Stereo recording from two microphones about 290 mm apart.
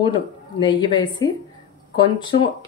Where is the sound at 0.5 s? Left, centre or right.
Centre.